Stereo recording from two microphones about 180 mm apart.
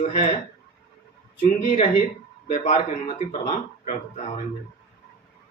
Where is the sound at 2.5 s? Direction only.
40° left (ahead or behind).